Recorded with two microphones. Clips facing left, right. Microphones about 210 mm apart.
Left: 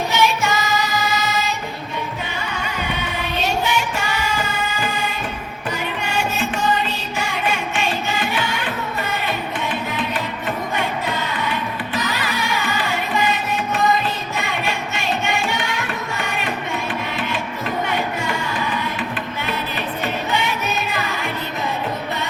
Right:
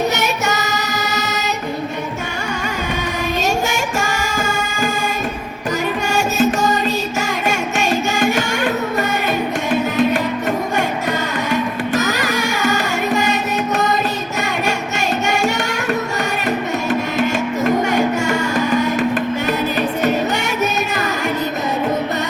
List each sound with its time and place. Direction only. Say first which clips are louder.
0.2 s music: left 1 dB; 45° right (ahead or behind)
3.4 s music: left 1 dB; 45° right (ahead or behind)
6.1 s music: right 7 dB; 45° right (ahead or behind)
11.4 s music: right 6 dB; 45° right (ahead or behind)
17.8 s music: right 7 dB; 45° right (ahead or behind)
20.1 s music: right 5 dB; 45° right (ahead or behind)